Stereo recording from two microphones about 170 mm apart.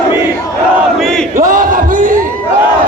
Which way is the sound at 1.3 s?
50° right (ahead or behind).